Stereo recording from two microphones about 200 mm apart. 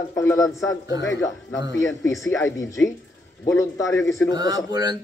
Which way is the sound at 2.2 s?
15° left (ahead or behind).